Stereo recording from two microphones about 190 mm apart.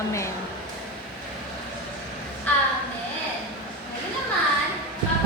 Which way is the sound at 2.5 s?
10° left (ahead or behind).